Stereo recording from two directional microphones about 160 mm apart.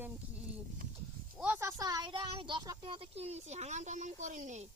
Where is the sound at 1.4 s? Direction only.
10° right (ahead or behind); by 4.6 s 50° right (ahead or behind).